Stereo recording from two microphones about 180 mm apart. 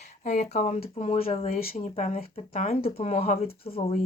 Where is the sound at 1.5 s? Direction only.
55° left (ahead or behind).